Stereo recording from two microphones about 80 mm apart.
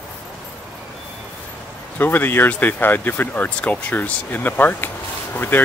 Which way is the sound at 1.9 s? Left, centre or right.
Left.